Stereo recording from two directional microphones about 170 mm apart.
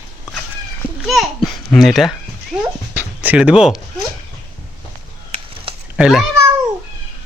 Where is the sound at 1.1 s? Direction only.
Centre (ahead or behind).